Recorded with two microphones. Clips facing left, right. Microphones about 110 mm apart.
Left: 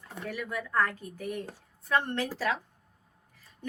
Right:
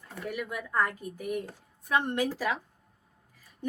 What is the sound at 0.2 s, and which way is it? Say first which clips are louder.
A woman's voice: even; 10° right (ahead or behind).